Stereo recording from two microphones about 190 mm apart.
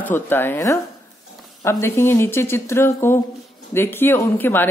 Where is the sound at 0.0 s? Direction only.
10° left (ahead or behind).